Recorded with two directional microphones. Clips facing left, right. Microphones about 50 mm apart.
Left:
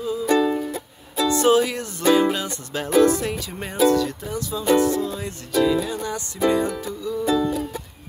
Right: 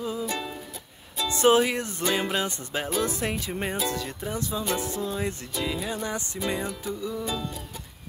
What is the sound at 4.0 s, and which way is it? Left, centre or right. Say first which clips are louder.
Music: left 5 dB; right.